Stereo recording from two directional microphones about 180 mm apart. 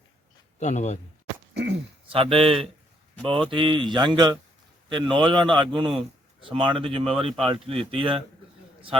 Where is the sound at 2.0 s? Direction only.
30° right (ahead or behind).